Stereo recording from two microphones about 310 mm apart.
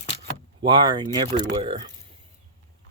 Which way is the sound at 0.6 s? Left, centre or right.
Centre.